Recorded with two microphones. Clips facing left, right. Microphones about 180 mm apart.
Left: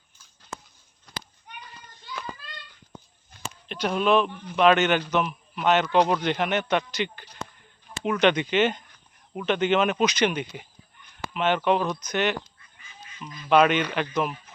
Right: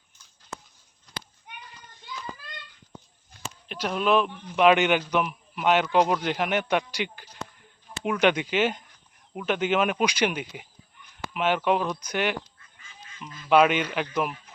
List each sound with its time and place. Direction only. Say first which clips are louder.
3.7 s a man's voice: left 2 dB; centre (ahead or behind)
13.1 s a sound: left 2 dB; 15° left (ahead or behind)
13.5 s a man's voice: even; 5° right (ahead or behind)